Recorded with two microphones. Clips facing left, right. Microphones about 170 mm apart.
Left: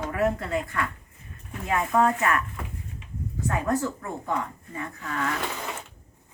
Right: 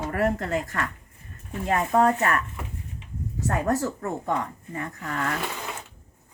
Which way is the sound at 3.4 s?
40° right (ahead or behind).